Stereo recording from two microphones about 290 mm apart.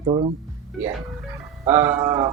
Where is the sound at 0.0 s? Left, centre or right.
Centre.